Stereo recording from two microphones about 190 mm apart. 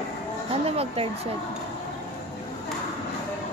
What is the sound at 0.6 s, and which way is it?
Speech, 30° right (ahead or behind).